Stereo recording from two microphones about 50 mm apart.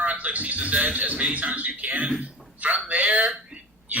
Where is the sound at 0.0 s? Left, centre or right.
Right.